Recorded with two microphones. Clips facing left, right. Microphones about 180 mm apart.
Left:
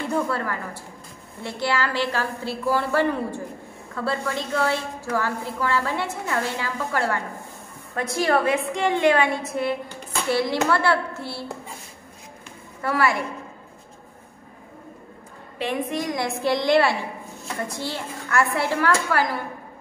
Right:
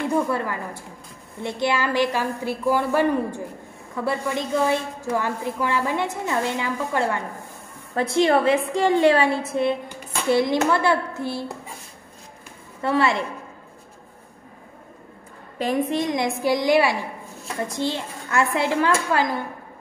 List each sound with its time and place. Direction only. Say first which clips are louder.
0.1 s a woman's voice: right 2 dB; 15° right (ahead or behind)
12.8 s a woman's voice: right 2 dB; 25° right (ahead or behind)
15.6 s a woman's voice: right 4 dB; 35° right (ahead or behind)
16.0 s a woman's voice: right 3 dB; 25° right (ahead or behind)
16.4 s a woman's voice: even; 10° right (ahead or behind)